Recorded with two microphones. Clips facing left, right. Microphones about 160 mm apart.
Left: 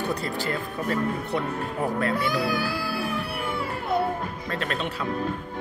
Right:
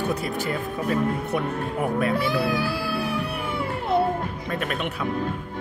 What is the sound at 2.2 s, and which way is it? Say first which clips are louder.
Speech: right 2 dB; 25° right (ahead or behind).